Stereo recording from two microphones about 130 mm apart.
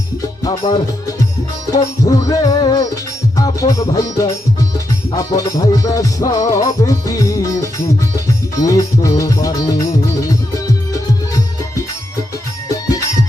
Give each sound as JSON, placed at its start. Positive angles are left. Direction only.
{"t": 1.7, "sound": "music", "side_deg": 30}
{"t": 12.6, "sound": "music", "side_deg": 25}